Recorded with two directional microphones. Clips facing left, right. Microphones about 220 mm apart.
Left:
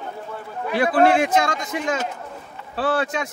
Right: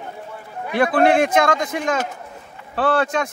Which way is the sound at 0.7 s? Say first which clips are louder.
Right 1 dB; 55° right (ahead or behind).